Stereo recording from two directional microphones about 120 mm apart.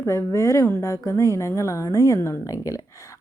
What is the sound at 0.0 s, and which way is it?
Speech, 25° left (ahead or behind).